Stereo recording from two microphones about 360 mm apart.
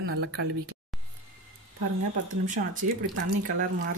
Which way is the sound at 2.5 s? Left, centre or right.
Right.